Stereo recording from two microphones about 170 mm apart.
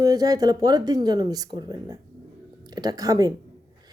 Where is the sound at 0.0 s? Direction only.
20° right (ahead or behind).